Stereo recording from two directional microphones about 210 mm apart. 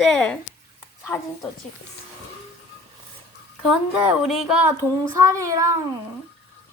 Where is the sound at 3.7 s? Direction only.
5° right (ahead or behind).